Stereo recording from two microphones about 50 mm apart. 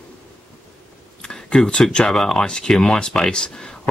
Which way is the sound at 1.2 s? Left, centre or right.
Centre.